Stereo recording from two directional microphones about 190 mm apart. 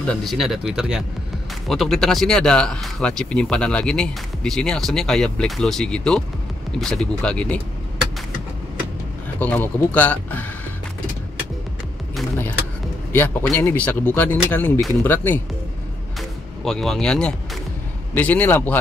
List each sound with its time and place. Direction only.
0.0 s speech: 5° left (ahead or behind)
9.4 s speech: 10° left (ahead or behind)
13.1 s speech: 10° left (ahead or behind)